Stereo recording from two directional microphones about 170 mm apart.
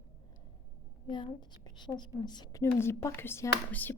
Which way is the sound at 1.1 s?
25° left (ahead or behind).